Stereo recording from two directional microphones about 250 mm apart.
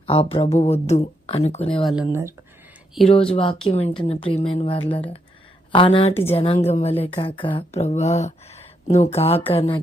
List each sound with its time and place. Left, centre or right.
0.1 s speech: left
1.8 s speech: centre
3.1 s speech: left